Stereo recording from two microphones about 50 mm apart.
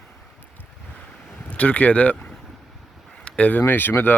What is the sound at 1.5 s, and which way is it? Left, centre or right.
Speech, left.